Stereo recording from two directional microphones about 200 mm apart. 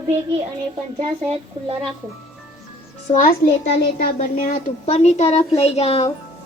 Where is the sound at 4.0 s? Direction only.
45° left (ahead or behind); by 6.1 s 30° left (ahead or behind).